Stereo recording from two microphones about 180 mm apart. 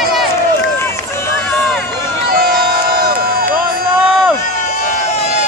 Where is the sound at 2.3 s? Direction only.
55° right (ahead or behind).